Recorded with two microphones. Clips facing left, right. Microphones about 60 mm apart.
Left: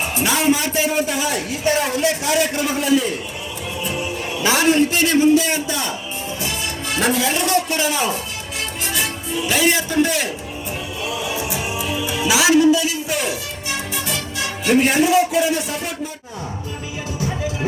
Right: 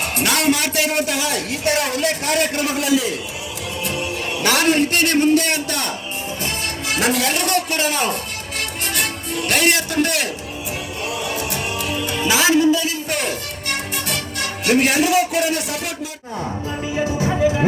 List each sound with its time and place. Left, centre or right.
0.0 s a sound: right
0.4 s speech: right
1.9 s a man's voice: right
2.6 s a man's voice: centre
3.8 s music: right
4.3 s music: centre
4.9 s speech: right
6.9 s a man's voice: centre
7.3 s speech: right
9.4 s speech: right
11.2 s music: centre
12.3 s music: centre
12.6 s a sound: centre
14.6 s a man's voice: centre